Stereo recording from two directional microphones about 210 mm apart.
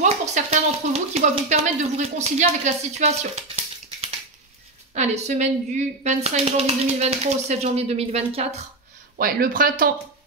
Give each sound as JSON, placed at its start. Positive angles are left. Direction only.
{"t": 0.0, "sound": "speech", "side_deg": -35}
{"t": 9.2, "sound": "speech", "side_deg": -45}